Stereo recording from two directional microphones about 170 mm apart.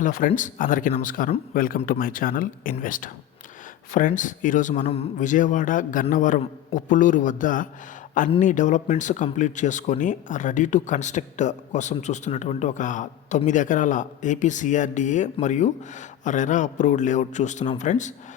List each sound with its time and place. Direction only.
0.0 s speech: 50° left (ahead or behind)